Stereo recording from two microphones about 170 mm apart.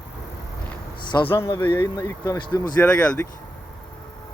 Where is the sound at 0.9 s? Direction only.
25° left (ahead or behind).